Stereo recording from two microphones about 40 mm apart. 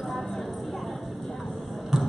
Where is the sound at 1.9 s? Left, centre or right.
Centre.